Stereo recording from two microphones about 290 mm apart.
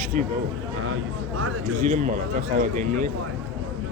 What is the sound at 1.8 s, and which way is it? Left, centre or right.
Speech, right.